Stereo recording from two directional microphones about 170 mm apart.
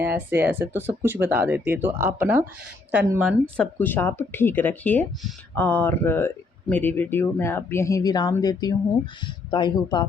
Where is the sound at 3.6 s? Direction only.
10° left (ahead or behind).